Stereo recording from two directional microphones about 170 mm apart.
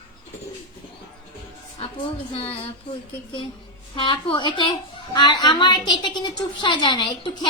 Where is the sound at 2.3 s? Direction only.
35° left (ahead or behind).